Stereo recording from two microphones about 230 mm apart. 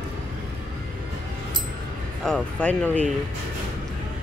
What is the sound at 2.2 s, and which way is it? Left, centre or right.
Speech, centre.